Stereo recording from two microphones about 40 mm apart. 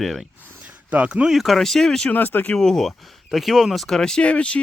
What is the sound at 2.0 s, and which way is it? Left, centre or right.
Speech, left.